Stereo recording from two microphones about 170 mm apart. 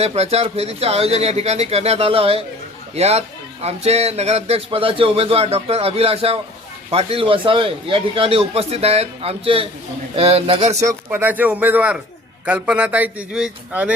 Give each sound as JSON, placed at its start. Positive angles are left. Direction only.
{"t": 0.0, "sound": "a man's voice", "side_deg": -35}
{"t": 10.8, "sound": "a man's voice", "side_deg": -15}